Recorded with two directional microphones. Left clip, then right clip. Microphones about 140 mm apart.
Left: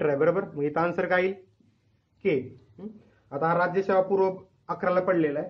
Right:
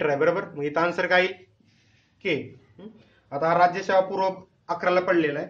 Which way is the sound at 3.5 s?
40° left (ahead or behind).